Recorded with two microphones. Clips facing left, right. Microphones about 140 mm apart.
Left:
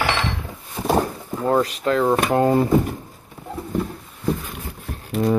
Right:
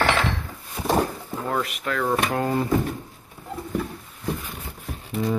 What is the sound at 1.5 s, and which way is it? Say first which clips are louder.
Speech: left 8 dB; 30° left (ahead or behind).